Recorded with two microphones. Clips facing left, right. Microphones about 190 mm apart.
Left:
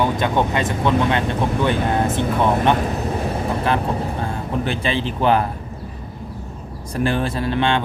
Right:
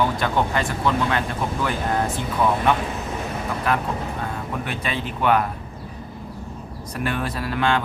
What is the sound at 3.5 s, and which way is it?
Speech, 30° left (ahead or behind).